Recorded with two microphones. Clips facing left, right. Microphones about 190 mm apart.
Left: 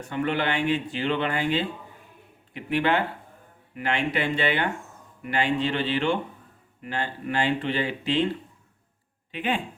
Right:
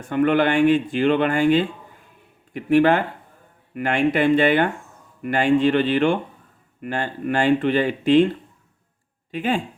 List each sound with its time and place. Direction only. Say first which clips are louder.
0.0 s speech: right 8 dB; 50° right (ahead or behind)
9.3 s speech: right 5 dB; 40° right (ahead or behind)